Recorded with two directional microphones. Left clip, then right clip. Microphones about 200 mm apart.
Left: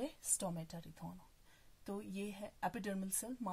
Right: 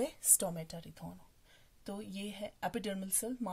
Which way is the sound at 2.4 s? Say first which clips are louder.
Right 5 dB; 30° right (ahead or behind).